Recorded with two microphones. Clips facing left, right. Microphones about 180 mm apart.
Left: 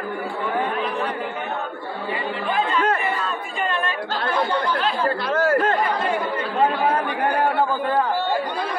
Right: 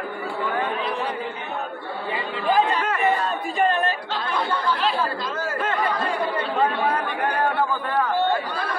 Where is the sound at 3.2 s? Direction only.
40° right (ahead or behind).